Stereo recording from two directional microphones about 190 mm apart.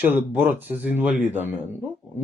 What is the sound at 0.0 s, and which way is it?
A man's voice, 10° right (ahead or behind).